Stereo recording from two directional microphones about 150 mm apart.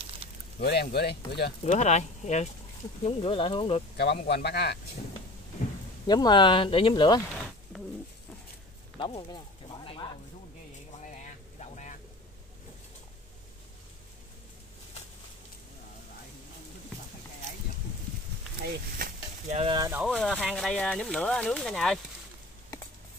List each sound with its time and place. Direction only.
0.2 s a sound: 35° right (ahead or behind)
0.6 s speech: 90° left
1.6 s speech: 50° left (ahead or behind)
3.0 s speech: 40° left (ahead or behind)
3.9 s speech: 90° left
6.0 s speech: 30° left (ahead or behind)
8.9 s a sound: 35° left (ahead or behind)
11.6 s vehicle: 50° left (ahead or behind)
18.6 s speech: 70° right (ahead or behind)
20.1 s speech: 5° left (ahead or behind)